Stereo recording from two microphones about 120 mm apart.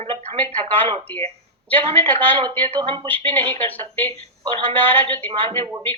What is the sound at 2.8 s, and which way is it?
Speech, 40° right (ahead or behind).